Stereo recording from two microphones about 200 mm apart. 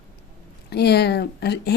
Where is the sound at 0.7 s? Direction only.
55° left (ahead or behind).